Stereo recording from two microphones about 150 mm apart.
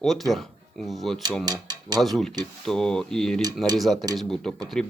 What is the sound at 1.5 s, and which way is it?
Speech, 25° right (ahead or behind).